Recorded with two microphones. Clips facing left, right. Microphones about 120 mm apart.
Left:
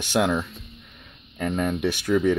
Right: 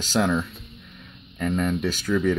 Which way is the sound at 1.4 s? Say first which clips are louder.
Even; 15° left (ahead or behind).